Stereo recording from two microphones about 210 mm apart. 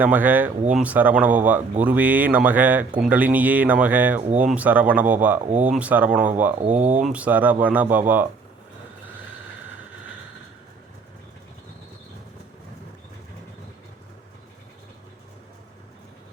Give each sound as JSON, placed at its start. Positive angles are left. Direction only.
{"t": 0.0, "sound": "speech", "side_deg": -10}
{"t": 6.6, "sound": "speech", "side_deg": -35}
{"t": 7.0, "sound": "speech", "side_deg": -5}